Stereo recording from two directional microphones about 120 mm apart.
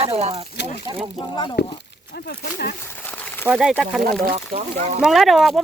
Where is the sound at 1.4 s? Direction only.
40° left (ahead or behind).